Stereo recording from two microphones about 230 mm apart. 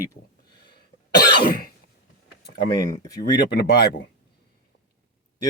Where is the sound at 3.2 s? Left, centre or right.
Left.